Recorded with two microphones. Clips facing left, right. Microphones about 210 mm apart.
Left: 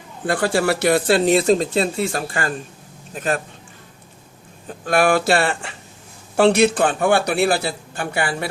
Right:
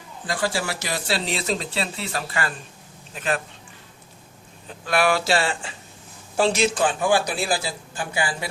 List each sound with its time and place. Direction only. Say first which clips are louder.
0.3 s speech: left 7 dB; 60° left (ahead or behind); by 3.4 s 45° left (ahead or behind)
4.9 s a man's voice: left 4 dB; 50° left (ahead or behind)